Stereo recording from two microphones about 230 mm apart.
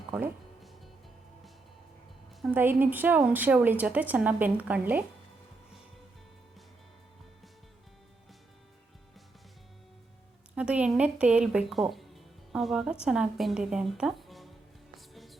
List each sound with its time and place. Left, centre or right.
0.1 s music: centre
2.4 s a woman's voice: centre
10.5 s a woman's voice: centre
14.9 s music: centre